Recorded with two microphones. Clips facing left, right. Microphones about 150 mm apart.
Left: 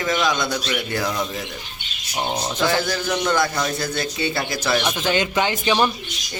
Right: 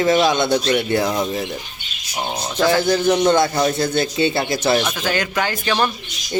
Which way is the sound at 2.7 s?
25° right (ahead or behind).